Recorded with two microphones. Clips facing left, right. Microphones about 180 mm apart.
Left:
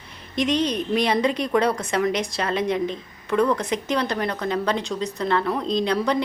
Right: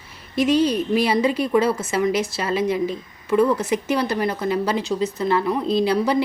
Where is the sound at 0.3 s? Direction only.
5° right (ahead or behind).